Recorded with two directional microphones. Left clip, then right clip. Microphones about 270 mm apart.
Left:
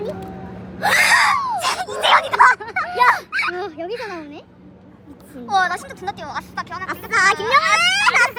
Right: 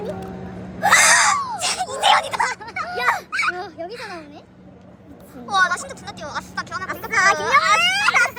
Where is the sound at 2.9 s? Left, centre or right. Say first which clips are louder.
Left 6 dB; centre.